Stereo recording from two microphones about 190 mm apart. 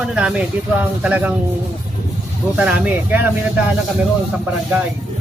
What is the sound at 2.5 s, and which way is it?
Speech, 5° right (ahead or behind).